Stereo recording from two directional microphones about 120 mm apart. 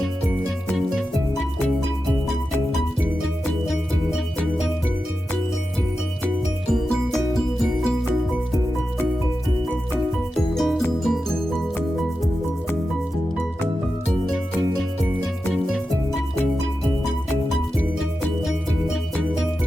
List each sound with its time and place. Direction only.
7.1 s music: centre (ahead or behind)
10.5 s music: centre (ahead or behind)